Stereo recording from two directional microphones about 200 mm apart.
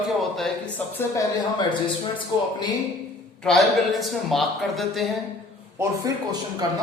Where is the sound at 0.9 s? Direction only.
15° left (ahead or behind).